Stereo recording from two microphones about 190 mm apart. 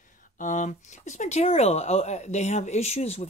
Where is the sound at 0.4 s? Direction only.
40° left (ahead or behind).